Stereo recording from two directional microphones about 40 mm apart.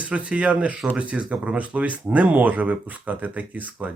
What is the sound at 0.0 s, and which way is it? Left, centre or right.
Speech, right.